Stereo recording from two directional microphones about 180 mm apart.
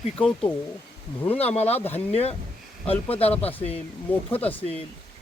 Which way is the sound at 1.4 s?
35° left (ahead or behind).